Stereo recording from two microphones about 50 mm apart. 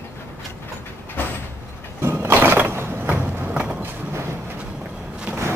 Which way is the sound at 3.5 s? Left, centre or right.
Centre.